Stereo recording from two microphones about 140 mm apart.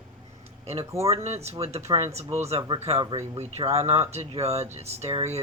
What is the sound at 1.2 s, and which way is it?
Speech, 50° right (ahead or behind).